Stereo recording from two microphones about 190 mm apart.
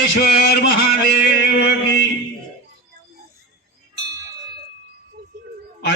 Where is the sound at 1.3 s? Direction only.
65° left (ahead or behind).